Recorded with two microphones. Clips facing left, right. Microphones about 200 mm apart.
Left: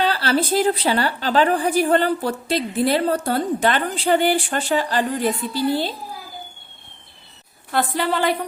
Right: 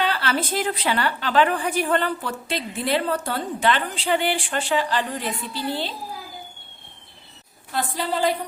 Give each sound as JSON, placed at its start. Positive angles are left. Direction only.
{"t": 0.0, "sound": "a woman's voice", "side_deg": 35}
{"t": 7.7, "sound": "a woman's voice", "side_deg": 65}